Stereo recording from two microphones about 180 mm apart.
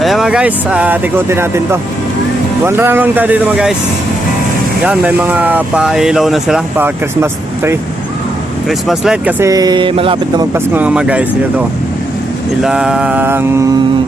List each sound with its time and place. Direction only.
0.0 s speech: centre (ahead or behind)
4.9 s speech: 10° right (ahead or behind)
8.9 s speech: 5° right (ahead or behind)
9.4 s a sound: 20° right (ahead or behind)
10.5 s speech: 10° right (ahead or behind)
12.6 s speech: 5° right (ahead or behind)